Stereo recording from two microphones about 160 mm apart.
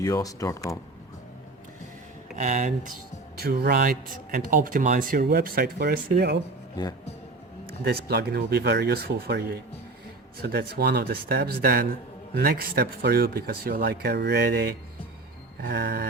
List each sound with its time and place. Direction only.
0.0 s speech: 20° left (ahead or behind)
2.3 s speech: 50° right (ahead or behind)
3.3 s speech: 75° right (ahead or behind)
7.9 s speech: 85° right
15.6 s a sound: 90° right